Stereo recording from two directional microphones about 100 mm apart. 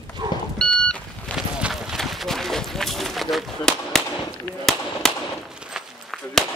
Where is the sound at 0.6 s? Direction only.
10° left (ahead or behind).